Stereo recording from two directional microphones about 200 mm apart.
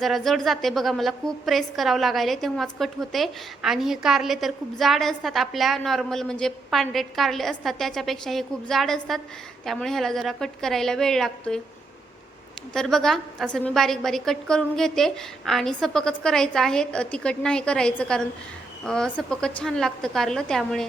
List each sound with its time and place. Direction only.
0.0 s a woman's voice: centre (ahead or behind)
12.7 s a woman's voice: 5° left (ahead or behind)